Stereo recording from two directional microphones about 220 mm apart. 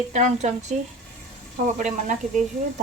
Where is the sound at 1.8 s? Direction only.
35° right (ahead or behind).